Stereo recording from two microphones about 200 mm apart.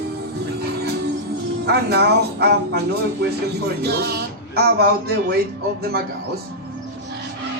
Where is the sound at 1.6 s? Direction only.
55° right (ahead or behind).